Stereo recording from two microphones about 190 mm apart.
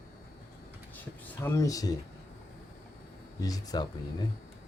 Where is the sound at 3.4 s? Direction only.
20° left (ahead or behind).